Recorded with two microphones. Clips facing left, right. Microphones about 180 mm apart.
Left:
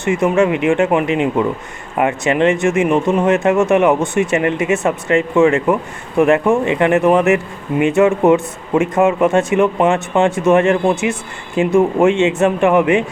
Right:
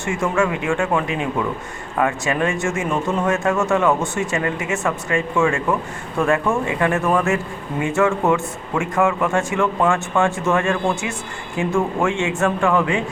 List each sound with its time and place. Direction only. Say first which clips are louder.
0.0 s speech: left 6 dB; 20° left (ahead or behind)